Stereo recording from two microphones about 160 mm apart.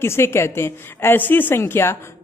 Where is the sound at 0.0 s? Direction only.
15° left (ahead or behind).